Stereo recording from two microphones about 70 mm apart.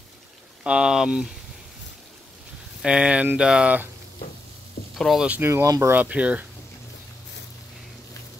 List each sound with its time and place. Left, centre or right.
0.7 s speech: centre
2.8 s speech: centre
4.9 s speech: centre
5.4 s speech: right
5.9 s speech: right